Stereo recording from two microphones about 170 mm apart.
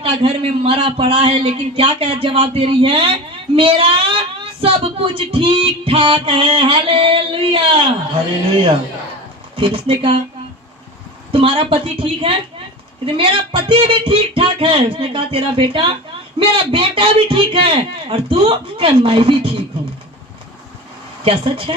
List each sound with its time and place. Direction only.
0.0 s a man's voice: 35° right (ahead or behind)
9.6 s a man's voice: 30° right (ahead or behind)
11.3 s a man's voice: 30° right (ahead or behind)
21.2 s a man's voice: 30° right (ahead or behind)